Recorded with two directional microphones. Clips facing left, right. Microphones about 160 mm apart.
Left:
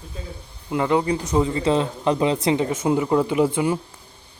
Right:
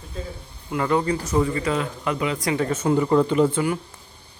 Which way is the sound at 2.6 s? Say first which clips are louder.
Even; 10° left (ahead or behind).